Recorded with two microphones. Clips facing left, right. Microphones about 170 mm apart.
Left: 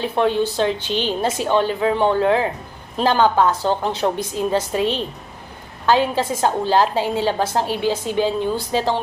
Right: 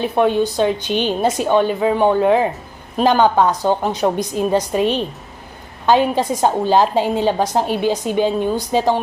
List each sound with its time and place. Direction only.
0.0 s a woman's voice: 15° right (ahead or behind)